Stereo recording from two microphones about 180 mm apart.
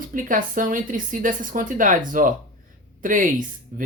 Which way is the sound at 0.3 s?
45° right (ahead or behind).